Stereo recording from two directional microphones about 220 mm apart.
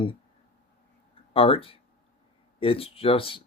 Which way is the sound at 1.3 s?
25° left (ahead or behind).